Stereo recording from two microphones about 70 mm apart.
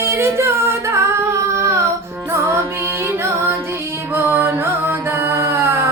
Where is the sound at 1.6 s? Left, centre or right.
Right.